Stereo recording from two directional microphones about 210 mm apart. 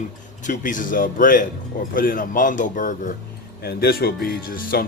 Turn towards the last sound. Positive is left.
turn(degrees=45)  # may be behind; listen again after turning